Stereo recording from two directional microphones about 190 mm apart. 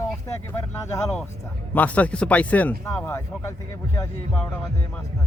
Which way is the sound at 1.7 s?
10° left (ahead or behind).